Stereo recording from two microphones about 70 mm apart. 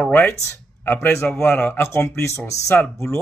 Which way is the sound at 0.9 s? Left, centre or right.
Left.